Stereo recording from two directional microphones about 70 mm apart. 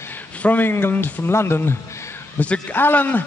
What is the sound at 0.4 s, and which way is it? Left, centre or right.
A man's voice, left.